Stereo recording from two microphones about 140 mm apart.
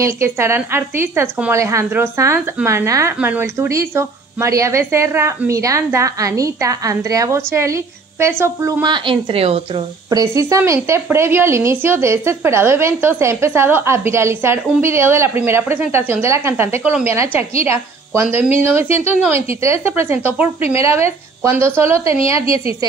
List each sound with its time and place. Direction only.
0.0 s speech: 20° right (ahead or behind)
8.8 s speech: 35° right (ahead or behind)
10.0 s a woman's voice: 25° right (ahead or behind)